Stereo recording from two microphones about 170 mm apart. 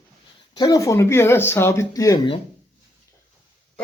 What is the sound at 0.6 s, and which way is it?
Speech, 20° left (ahead or behind).